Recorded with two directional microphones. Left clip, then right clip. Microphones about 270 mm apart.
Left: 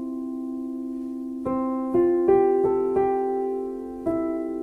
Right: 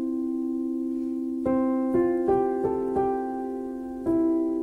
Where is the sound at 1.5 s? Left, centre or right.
Right.